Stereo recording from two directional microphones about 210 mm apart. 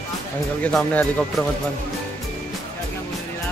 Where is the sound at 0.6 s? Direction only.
5° left (ahead or behind).